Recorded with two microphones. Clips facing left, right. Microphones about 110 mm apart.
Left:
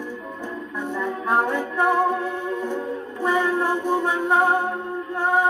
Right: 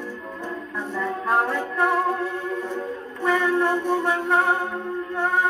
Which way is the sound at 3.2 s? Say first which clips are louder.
Right 1 dB; 25° left (ahead or behind).